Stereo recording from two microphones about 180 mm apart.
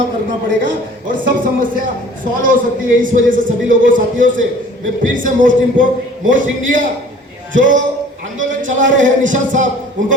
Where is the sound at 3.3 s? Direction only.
50° right (ahead or behind).